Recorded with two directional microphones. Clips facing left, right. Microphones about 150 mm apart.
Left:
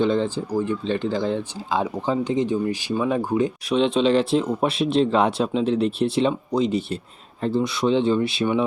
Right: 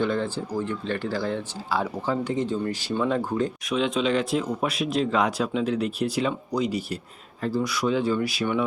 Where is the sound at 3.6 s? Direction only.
30° left (ahead or behind).